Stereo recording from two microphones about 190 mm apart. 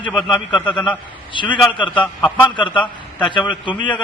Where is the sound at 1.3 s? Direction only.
25° left (ahead or behind).